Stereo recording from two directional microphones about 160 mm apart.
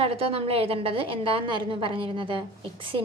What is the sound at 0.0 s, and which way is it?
A woman's voice, 35° right (ahead or behind).